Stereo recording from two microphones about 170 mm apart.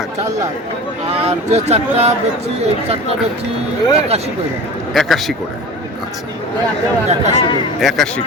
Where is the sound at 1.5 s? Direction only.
40° right (ahead or behind).